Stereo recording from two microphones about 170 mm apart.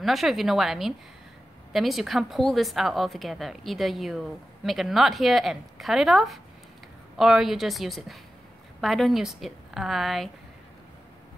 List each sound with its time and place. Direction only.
0.0 s a woman's voice: centre (ahead or behind)